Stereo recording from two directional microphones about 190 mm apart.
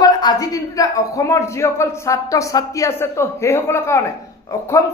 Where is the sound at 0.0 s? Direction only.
20° left (ahead or behind).